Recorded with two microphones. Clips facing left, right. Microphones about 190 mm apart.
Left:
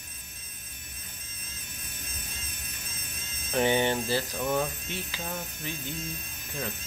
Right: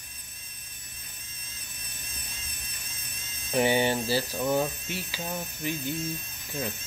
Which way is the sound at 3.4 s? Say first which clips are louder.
Right 1 dB; 15° right (ahead or behind).